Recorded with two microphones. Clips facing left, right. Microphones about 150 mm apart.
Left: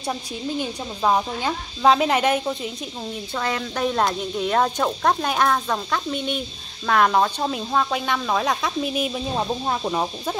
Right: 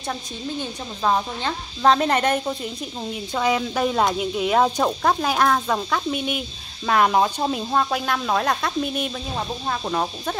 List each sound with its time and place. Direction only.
0.6 s speech: 10° left (ahead or behind)
3.3 s speech: 10° right (ahead or behind)
9.1 s speech: 20° left (ahead or behind)